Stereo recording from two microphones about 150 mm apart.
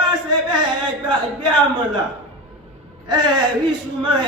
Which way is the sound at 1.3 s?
30° right (ahead or behind).